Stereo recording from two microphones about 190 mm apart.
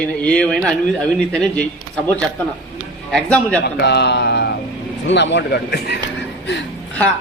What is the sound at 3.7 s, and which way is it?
Speech, 60° left (ahead or behind).